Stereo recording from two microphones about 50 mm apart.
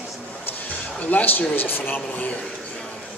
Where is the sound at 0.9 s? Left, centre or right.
Left.